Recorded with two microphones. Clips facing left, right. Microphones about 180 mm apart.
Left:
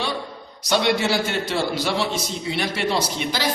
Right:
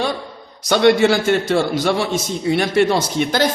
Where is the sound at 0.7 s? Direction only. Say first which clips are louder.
Right 7 dB; 55° right (ahead or behind).